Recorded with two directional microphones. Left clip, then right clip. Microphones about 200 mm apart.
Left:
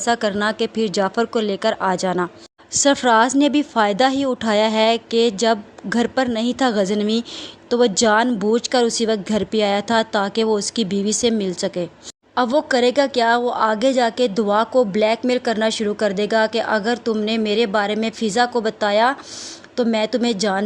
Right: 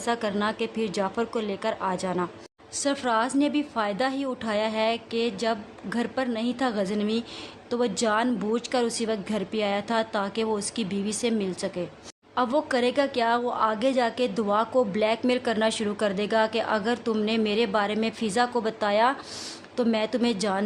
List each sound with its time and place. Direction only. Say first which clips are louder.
0.0 s a woman's voice: left 8 dB; 25° left (ahead or behind)